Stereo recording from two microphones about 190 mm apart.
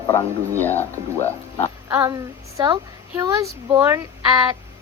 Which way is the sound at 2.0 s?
20° right (ahead or behind).